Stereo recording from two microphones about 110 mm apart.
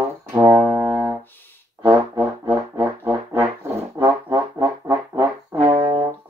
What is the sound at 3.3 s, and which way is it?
Music, 25° right (ahead or behind).